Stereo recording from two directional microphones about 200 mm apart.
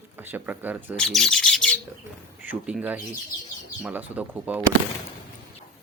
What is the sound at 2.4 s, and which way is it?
A man's voice, 5° right (ahead or behind).